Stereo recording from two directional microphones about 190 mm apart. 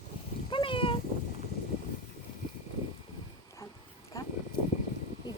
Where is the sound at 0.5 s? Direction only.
25° left (ahead or behind).